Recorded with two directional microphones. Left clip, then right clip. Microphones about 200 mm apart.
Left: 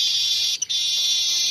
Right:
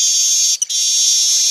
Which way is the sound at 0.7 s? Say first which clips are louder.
Right 5 dB; 20° right (ahead or behind).